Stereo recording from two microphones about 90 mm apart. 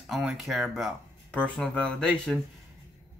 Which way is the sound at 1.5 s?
10° left (ahead or behind).